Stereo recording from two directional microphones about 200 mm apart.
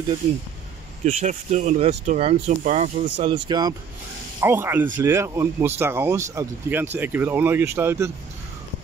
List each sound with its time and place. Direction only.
1.0 s speech: 35° right (ahead or behind)
3.4 s speech: 20° right (ahead or behind)